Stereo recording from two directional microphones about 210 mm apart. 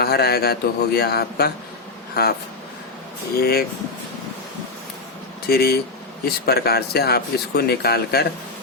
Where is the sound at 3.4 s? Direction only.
45° left (ahead or behind).